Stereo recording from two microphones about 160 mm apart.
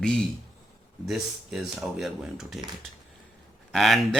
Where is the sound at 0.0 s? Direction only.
5° left (ahead or behind).